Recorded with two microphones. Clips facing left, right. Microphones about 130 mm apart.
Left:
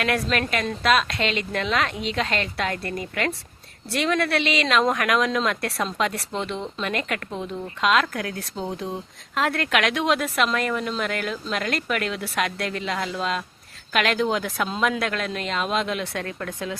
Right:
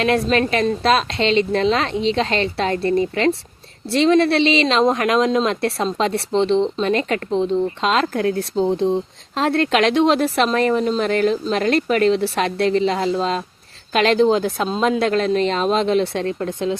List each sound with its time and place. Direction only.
0.0 s speech: 25° right (ahead or behind)